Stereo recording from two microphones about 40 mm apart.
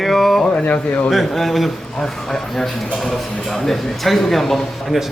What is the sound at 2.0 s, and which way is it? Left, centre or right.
Speech, centre.